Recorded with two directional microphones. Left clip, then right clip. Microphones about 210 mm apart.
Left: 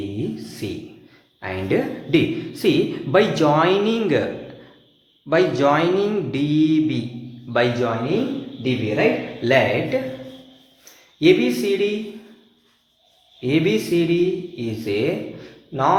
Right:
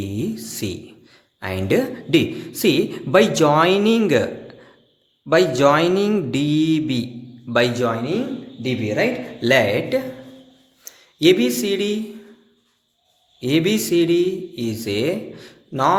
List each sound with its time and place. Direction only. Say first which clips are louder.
0.3 s a man's voice: right 1 dB; 50° right (ahead or behind)
5.3 s a man's voice: right 2 dB; 45° right (ahead or behind)
13.4 s a man's voice: even; 55° right (ahead or behind)